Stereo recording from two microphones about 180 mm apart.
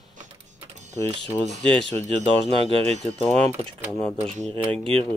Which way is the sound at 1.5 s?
30° right (ahead or behind).